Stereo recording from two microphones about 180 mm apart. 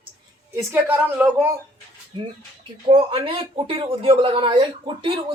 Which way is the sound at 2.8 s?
30° right (ahead or behind).